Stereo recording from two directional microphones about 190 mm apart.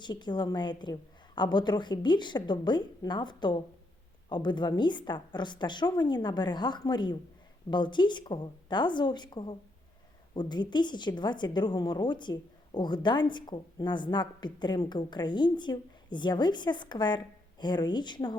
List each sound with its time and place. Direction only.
0.0 s a woman's voice: 25° left (ahead or behind)